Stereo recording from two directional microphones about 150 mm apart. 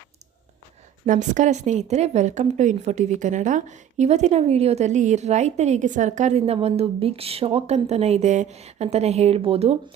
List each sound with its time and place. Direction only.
1.0 s a woman's voice: 60° right (ahead or behind); by 9.7 s 40° right (ahead or behind)